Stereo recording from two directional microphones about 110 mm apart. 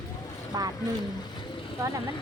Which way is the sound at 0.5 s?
35° right (ahead or behind).